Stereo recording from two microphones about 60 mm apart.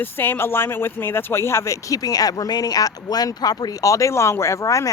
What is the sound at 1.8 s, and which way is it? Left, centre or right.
Speech, left.